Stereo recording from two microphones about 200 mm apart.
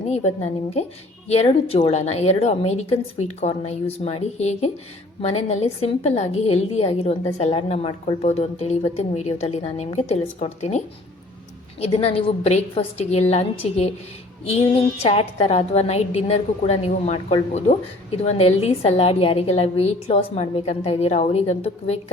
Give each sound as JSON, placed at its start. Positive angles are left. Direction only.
{"t": 0.1, "sound": "a woman's voice", "side_deg": 35}